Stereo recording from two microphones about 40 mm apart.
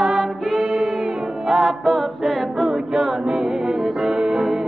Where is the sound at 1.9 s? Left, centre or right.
Centre.